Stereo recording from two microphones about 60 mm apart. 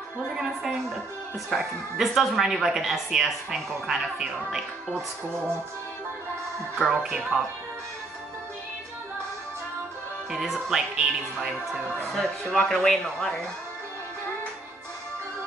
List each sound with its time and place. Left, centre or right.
0.4 s speech: centre
6.9 s speech: centre
10.3 s speech: centre
12.1 s speech: centre